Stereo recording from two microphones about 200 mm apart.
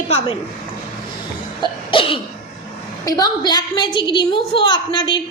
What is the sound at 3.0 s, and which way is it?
A woman's voice, 20° left (ahead or behind).